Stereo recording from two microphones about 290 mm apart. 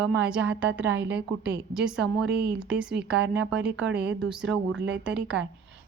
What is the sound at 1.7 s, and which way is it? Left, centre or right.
Speech, centre.